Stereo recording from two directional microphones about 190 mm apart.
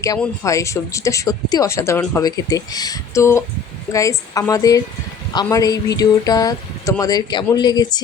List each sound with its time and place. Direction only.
0.4 s speech: 15° left (ahead or behind)